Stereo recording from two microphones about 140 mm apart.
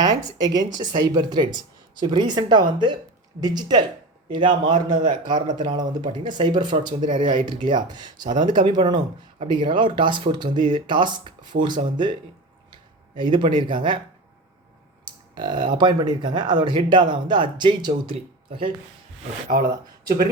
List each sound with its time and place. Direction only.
0.0 s a sound: 25° right (ahead or behind)
0.4 s speech: 30° right (ahead or behind)
13.1 s speech: 35° right (ahead or behind)
15.0 s speech: 35° right (ahead or behind)
19.5 s speech: 90° right